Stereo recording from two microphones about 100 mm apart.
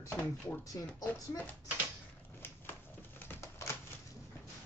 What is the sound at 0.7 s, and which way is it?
Speech, 35° left (ahead or behind).